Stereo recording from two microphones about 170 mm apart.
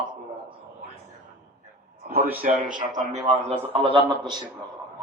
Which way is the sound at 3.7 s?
30° right (ahead or behind).